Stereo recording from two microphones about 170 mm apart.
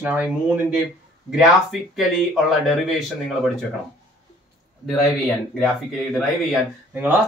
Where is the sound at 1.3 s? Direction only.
Centre (ahead or behind).